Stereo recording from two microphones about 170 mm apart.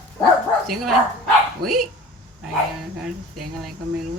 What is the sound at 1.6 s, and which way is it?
Speech, 65° right (ahead or behind).